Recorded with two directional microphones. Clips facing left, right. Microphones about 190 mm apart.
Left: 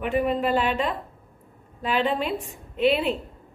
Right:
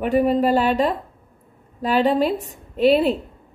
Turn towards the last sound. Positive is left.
turn(degrees=-40)  # may be behind; listen again after turning